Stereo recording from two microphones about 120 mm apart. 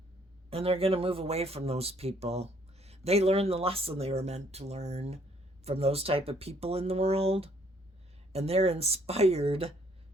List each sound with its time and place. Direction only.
0.5 s speech: 55° right (ahead or behind)